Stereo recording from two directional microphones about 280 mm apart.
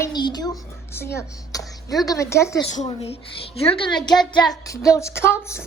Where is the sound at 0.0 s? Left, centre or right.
Centre.